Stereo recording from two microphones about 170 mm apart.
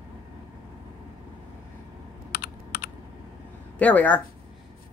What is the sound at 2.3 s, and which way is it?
Computer keyboard, 65° left (ahead or behind).